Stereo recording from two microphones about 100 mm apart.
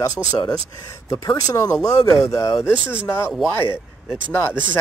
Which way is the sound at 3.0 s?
Centre (ahead or behind).